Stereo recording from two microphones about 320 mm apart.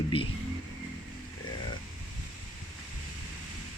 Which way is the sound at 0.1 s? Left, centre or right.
Centre.